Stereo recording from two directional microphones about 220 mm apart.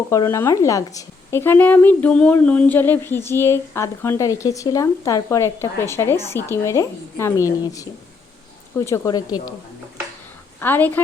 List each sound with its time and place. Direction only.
0.1 s a woman's voice: 15° left (ahead or behind)
10.6 s a woman's voice: 10° left (ahead or behind)